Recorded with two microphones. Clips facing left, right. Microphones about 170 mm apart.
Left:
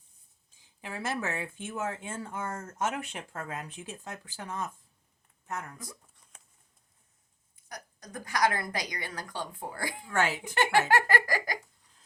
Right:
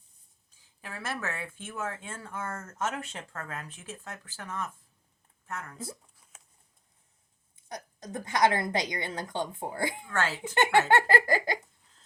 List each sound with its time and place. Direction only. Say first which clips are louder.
0.8 s speech: left 3 dB; 15° left (ahead or behind)
7.5 s a woman's voice: right 4 dB; 25° right (ahead or behind)
10.1 s speech: left 2 dB; 15° left (ahead or behind)
10.5 s a woman's voice: right 3 dB; 20° right (ahead or behind)